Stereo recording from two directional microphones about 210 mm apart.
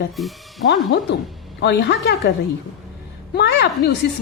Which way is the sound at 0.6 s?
60° left (ahead or behind).